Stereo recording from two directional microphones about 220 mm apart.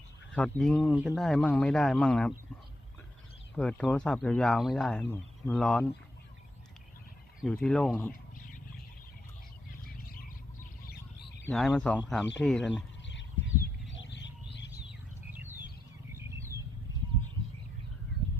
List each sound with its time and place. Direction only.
0.3 s speech: 5° left (ahead or behind)
3.5 s speech: 5° left (ahead or behind)
7.4 s speech: 5° left (ahead or behind)
10.1 s bird: 40° left (ahead or behind)
11.4 s speech: 5° left (ahead or behind)
13.1 s bird: 55° left (ahead or behind)
15.3 s chirp: 10° right (ahead or behind)
16.1 s bird: 10° right (ahead or behind)